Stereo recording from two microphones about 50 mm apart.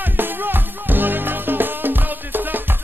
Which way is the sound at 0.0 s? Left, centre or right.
Right.